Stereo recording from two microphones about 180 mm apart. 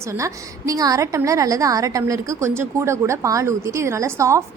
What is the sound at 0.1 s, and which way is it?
A woman's voice, 20° right (ahead or behind).